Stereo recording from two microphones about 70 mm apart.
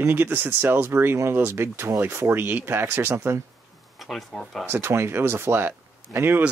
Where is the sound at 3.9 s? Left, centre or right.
Centre.